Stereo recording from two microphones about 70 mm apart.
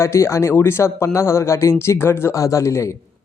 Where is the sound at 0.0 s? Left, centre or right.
Left.